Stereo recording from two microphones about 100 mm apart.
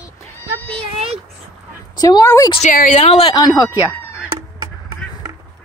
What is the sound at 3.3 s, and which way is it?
Speech, 45° left (ahead or behind).